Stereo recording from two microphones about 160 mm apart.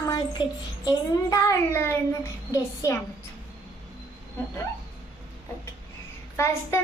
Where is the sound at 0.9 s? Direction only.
20° left (ahead or behind).